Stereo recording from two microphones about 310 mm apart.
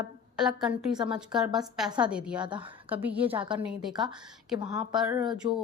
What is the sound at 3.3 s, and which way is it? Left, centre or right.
Speech, centre.